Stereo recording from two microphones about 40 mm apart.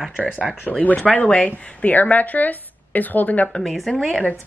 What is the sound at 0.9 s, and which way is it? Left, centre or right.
Speech, left.